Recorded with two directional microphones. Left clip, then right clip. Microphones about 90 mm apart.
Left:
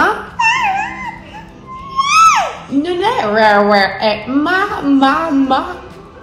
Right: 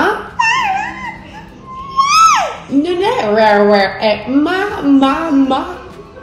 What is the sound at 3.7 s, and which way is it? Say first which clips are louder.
Speech: even; 5° left (ahead or behind).